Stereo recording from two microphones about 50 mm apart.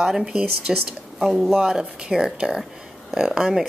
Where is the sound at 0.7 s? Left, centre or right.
Centre.